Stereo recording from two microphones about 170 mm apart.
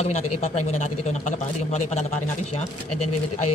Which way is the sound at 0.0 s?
40° left (ahead or behind).